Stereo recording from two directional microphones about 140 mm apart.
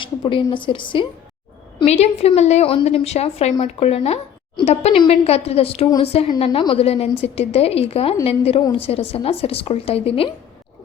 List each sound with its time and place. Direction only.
0.5 s a woman's voice: 35° left (ahead or behind)
1.8 s a woman's voice: 50° left (ahead or behind)